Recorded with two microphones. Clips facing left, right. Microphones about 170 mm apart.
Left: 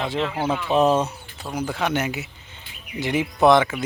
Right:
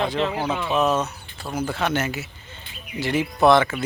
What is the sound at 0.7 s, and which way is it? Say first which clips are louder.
Speech: left 3 dB; 30° left (ahead or behind).